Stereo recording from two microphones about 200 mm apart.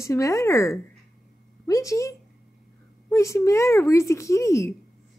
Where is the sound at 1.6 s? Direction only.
15° left (ahead or behind).